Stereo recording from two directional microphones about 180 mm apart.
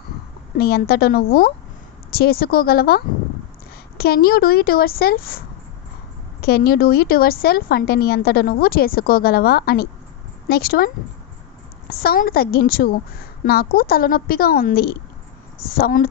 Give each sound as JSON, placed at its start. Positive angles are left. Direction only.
{"t": 0.6, "sound": "a woman's voice", "side_deg": 60}
{"t": 4.0, "sound": "a woman's voice", "side_deg": 55}
{"t": 6.4, "sound": "a woman's voice", "side_deg": 55}
{"t": 11.9, "sound": "a woman's voice", "side_deg": 60}